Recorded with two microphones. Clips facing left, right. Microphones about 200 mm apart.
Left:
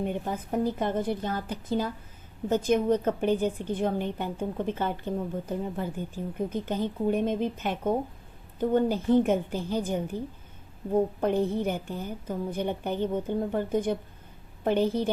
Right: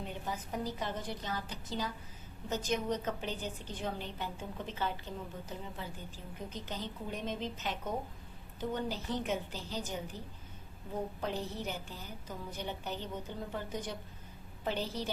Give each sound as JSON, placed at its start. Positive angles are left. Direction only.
{"t": 0.0, "sound": "a woman's voice", "side_deg": 55}